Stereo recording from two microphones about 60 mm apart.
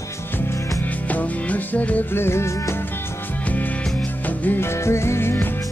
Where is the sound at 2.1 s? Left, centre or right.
Left.